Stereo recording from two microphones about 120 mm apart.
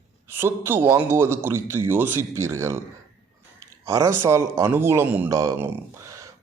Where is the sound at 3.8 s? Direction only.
25° right (ahead or behind).